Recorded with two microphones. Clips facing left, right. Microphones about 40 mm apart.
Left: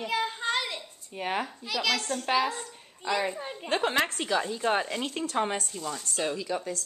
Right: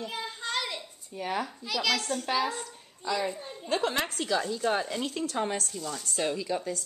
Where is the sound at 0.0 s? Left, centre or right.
Left.